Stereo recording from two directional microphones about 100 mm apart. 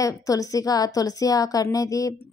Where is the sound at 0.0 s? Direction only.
35° left (ahead or behind).